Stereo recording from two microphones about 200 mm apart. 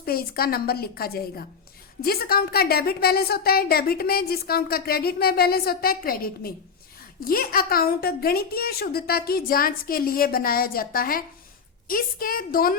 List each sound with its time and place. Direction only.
0.0 s a woman's voice: 50° left (ahead or behind)